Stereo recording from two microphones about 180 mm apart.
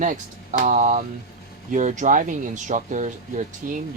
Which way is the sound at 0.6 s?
45° right (ahead or behind).